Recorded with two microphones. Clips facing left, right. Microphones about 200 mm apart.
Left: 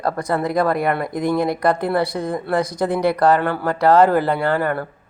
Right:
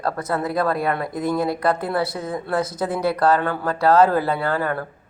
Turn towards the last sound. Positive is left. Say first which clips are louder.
# left 3 dB
turn(degrees=15)  # may be behind; listen again after turning